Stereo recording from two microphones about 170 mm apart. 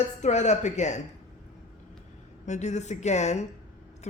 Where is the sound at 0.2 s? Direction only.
45° left (ahead or behind).